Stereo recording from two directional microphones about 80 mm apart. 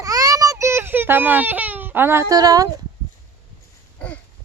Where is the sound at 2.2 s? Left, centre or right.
Right.